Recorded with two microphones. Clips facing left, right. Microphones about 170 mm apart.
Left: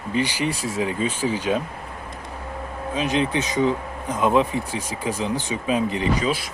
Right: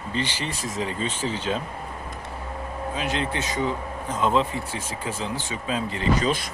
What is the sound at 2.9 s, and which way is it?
Speech, 20° left (ahead or behind).